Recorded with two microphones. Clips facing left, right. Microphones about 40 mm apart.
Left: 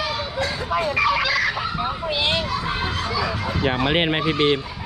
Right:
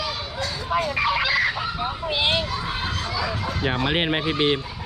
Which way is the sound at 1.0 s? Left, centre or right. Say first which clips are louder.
Left 2 dB; centre.